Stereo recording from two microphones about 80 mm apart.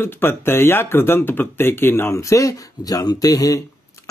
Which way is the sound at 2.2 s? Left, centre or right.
Left.